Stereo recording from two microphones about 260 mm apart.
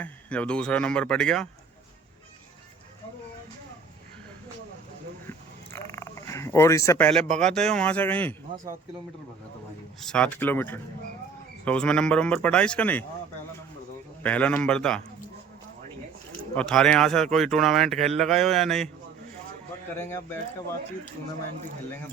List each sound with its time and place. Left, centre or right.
0.0 s speech: centre
5.7 s a sound: centre
7.2 s a man's voice: right
7.5 s speech: centre
10.0 s speech: centre
14.2 s speech: centre
16.6 s speech: centre
20.1 s speech: centre